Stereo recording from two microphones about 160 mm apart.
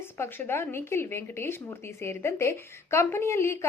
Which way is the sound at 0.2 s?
15° left (ahead or behind).